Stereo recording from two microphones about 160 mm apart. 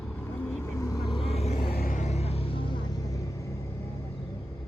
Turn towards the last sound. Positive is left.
turn(degrees=20)  # may be behind; listen again after turning